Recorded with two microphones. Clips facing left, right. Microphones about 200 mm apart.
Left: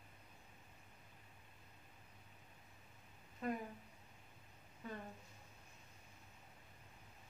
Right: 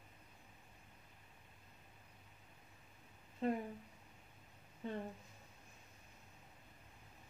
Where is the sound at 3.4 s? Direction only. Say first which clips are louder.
Right 4 dB; 25° right (ahead or behind).